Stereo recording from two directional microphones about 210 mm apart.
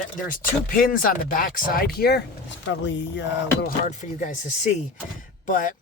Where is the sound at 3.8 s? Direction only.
35° left (ahead or behind).